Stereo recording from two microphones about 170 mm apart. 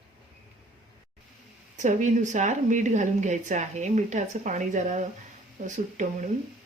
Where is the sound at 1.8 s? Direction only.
45° right (ahead or behind).